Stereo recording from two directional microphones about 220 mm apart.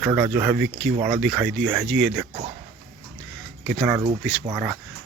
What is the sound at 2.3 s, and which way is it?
Speech, 20° right (ahead or behind).